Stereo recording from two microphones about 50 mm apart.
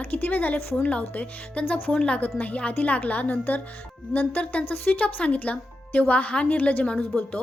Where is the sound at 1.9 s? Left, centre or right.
Centre.